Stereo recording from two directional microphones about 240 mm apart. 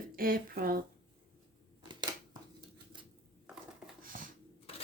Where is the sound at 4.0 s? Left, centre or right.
Right.